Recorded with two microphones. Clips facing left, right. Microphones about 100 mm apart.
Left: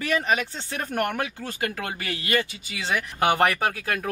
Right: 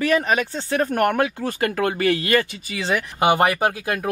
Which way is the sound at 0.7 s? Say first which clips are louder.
Right 8 dB; 70° right (ahead or behind).